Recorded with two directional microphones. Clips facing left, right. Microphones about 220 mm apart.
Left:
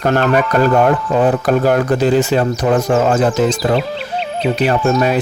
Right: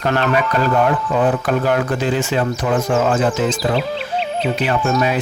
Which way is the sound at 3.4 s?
Centre (ahead or behind).